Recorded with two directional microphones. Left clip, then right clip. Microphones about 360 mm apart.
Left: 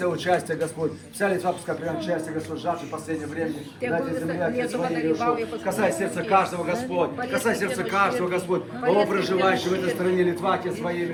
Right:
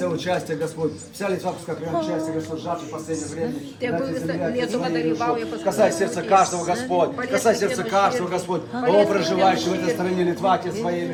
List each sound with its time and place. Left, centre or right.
5.2 s speech: right
9.1 s a man's voice: centre